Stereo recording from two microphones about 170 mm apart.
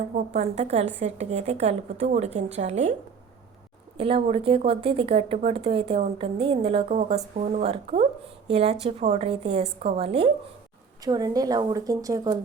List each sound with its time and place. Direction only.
0.2 s a woman's voice: 40° right (ahead or behind)
3.9 s a woman's voice: 35° right (ahead or behind)
11.0 s a woman's voice: 20° right (ahead or behind)